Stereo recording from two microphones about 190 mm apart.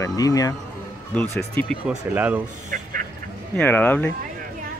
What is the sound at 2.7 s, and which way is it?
Music, 45° right (ahead or behind).